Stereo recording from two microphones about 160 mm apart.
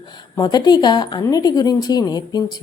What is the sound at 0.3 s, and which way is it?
A woman's voice, 25° left (ahead or behind).